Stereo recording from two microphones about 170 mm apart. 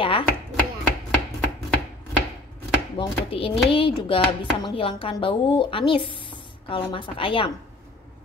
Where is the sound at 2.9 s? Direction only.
30° left (ahead or behind).